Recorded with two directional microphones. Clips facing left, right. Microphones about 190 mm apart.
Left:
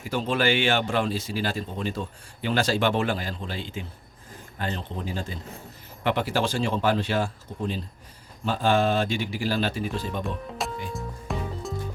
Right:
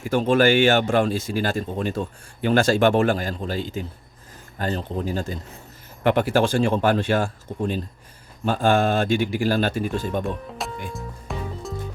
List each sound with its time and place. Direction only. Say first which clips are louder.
0.0 s speech: right 7 dB; 50° right (ahead or behind)
10.2 s music: right 2 dB; centre (ahead or behind)